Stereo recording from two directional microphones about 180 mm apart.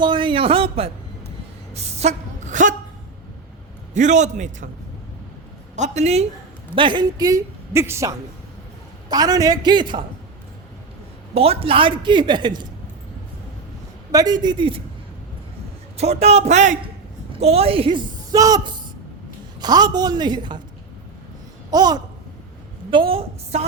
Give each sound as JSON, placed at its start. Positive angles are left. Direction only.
{"t": 0.0, "sound": "a man's voice", "side_deg": -25}
{"t": 1.7, "sound": "a sound", "side_deg": -35}
{"t": 3.9, "sound": "a man's voice", "side_deg": -40}
{"t": 5.7, "sound": "a man's voice", "side_deg": -40}
{"t": 6.7, "sound": "a woman's voice", "side_deg": -25}
{"t": 11.3, "sound": "a woman's voice", "side_deg": -35}
{"t": 14.1, "sound": "a woman's voice", "side_deg": -20}
{"t": 16.0, "sound": "a man's voice", "side_deg": -35}
{"t": 21.7, "sound": "a woman's voice", "side_deg": -20}